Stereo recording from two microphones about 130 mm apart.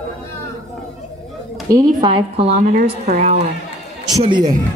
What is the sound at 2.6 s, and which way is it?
Speech, 85° right.